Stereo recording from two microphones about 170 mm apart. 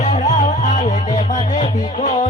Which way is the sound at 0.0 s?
45° left (ahead or behind).